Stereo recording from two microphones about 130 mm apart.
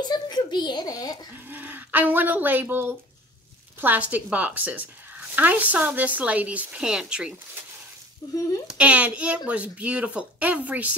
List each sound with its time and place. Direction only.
0.1 s a child's voice: 35° left (ahead or behind)
1.5 s speech: 15° right (ahead or behind)
8.2 s speech: 30° left (ahead or behind)
8.6 s speech: 10° right (ahead or behind)